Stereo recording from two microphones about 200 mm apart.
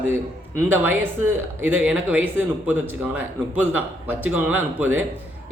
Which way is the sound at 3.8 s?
10° right (ahead or behind).